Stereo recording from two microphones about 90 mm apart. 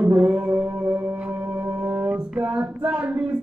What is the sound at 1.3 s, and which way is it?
Music, 25° right (ahead or behind).